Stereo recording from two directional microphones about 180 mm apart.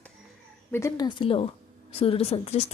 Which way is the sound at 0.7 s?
15° left (ahead or behind).